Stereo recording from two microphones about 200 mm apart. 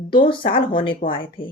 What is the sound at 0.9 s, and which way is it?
Speech, 45° left (ahead or behind).